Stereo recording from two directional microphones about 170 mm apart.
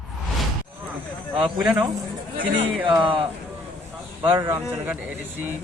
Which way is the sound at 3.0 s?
30° right (ahead or behind).